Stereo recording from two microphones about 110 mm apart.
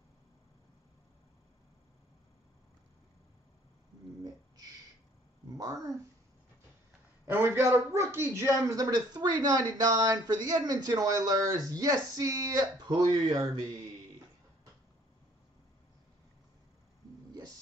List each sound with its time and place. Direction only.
5.6 s a man's voice: 30° right (ahead or behind)
7.2 s a man's voice: 20° right (ahead or behind)